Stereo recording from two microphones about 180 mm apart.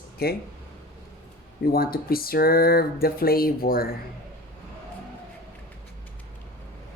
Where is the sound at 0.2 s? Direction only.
60° left (ahead or behind).